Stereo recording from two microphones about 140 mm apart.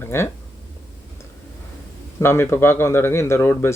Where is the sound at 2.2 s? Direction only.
15° left (ahead or behind).